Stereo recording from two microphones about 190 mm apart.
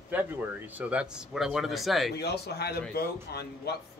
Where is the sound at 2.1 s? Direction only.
60° left (ahead or behind).